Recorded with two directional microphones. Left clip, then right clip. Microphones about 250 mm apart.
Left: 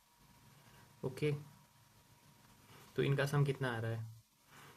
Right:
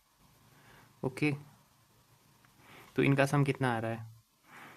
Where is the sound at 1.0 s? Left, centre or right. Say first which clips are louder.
Right 5 dB; right.